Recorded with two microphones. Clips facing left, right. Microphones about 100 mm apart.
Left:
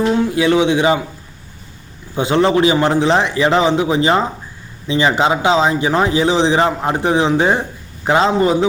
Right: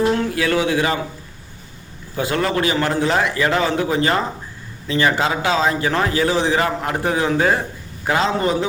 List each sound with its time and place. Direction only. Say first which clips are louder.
0.1 s a man's voice: left 5 dB; 15° left (ahead or behind)
2.1 s a man's voice: left 6 dB; 25° left (ahead or behind)